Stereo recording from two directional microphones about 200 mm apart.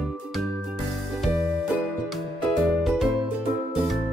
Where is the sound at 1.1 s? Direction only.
Centre (ahead or behind).